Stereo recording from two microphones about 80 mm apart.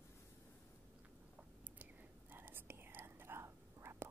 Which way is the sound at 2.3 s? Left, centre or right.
Right.